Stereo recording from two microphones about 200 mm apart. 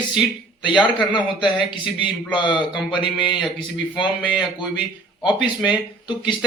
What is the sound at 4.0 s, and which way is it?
Speech, 25° left (ahead or behind).